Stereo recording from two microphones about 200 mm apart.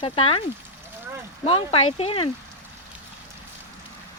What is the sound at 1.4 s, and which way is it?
Speech, 30° left (ahead or behind).